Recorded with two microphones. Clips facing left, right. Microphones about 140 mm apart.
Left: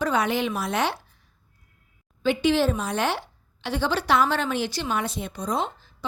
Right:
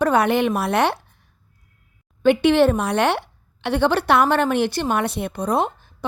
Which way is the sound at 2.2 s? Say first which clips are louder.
Right 6 dB; 60° right (ahead or behind).